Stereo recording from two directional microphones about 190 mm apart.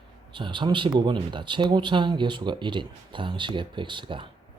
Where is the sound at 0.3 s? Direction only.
25° right (ahead or behind).